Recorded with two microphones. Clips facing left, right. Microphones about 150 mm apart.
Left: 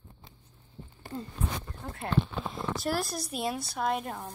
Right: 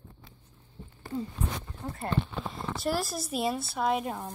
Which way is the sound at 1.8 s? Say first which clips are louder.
Left 1 dB; 5° right (ahead or behind).